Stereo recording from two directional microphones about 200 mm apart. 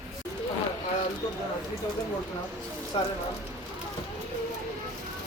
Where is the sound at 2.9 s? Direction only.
25° left (ahead or behind).